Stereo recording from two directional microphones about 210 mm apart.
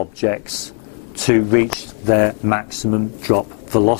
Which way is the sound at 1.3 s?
5° left (ahead or behind).